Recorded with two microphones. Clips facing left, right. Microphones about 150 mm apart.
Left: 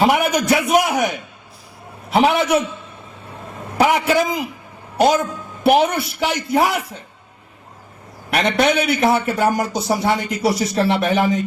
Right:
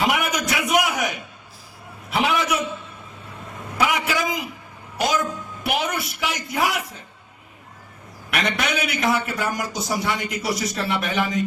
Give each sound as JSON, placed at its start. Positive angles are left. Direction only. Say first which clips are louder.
{"t": 0.0, "sound": "a sound", "louder": "left 6 dB", "side_deg": 35}
{"t": 0.3, "sound": "a man's voice", "louder": "left 6 dB", "side_deg": 30}
{"t": 3.8, "sound": "a man's voice", "louder": "left 6 dB", "side_deg": 35}
{"t": 5.6, "sound": "a man's voice", "louder": "left 10 dB", "side_deg": 30}
{"t": 8.3, "sound": "a man's voice", "louder": "left 7 dB", "side_deg": 35}